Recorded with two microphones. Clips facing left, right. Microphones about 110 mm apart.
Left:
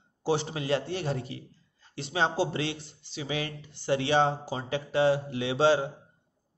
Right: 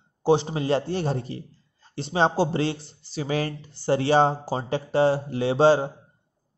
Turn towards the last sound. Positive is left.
turn(degrees=-35)  # may be behind; listen again after turning